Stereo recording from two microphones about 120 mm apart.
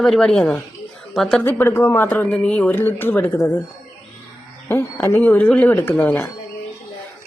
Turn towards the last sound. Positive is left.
turn(degrees=15)  # may be behind; listen again after turning